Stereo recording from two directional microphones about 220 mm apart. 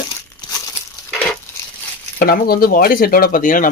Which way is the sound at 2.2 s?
40° left (ahead or behind).